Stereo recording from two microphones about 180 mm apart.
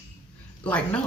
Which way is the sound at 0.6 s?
10° left (ahead or behind).